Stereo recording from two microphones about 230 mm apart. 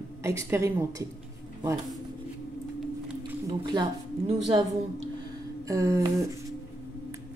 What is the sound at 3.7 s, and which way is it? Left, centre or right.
Speech, centre.